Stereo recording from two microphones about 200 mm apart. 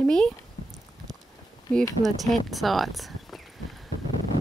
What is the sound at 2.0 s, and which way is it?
Speech, centre (ahead or behind).